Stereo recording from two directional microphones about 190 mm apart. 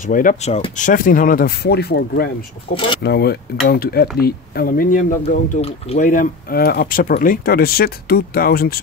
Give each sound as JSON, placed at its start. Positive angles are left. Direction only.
{"t": 0.0, "sound": "speech", "side_deg": 45}